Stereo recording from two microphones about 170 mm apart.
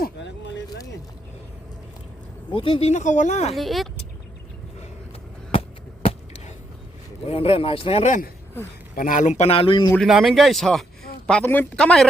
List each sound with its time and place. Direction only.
0.0 s a sound: 90° left
2.5 s speech: 30° left (ahead or behind)
2.9 s speech: 45° left (ahead or behind)
3.5 s speech: centre (ahead or behind)
6.1 s a sound: 40° left (ahead or behind)
7.3 s speech: 35° left (ahead or behind)
9.0 s speech: 50° left (ahead or behind); by 9.9 s 30° left (ahead or behind)
9.9 s speech: centre (ahead or behind)